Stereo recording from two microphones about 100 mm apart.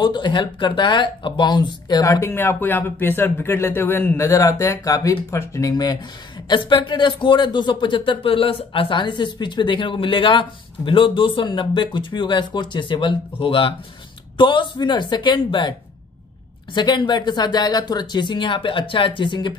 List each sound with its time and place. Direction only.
0.0 s a man's voice: 50° left (ahead or behind); by 2.3 s 35° left (ahead or behind)
2.3 s speech: 20° left (ahead or behind)
4.3 s speech: 35° left (ahead or behind)
6.5 s a man's voice: 50° left (ahead or behind)
16.7 s a man's voice: 45° left (ahead or behind)